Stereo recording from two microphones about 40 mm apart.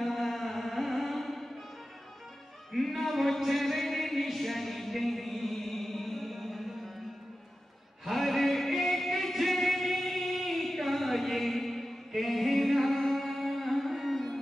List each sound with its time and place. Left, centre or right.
0.0 s music: centre
2.7 s a sound: centre
8.0 s music: centre